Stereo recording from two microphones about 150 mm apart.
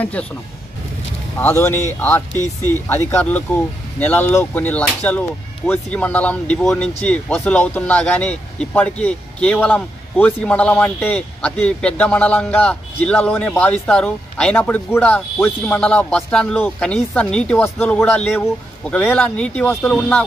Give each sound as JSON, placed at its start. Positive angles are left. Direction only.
{"t": 0.0, "sound": "speech", "side_deg": 10}
{"t": 1.4, "sound": "speech", "side_deg": 15}
{"t": 2.3, "sound": "speech", "side_deg": -25}
{"t": 2.7, "sound": "speech", "side_deg": 15}